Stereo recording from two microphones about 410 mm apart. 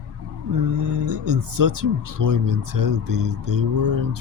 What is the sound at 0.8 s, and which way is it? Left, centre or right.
Speech, right.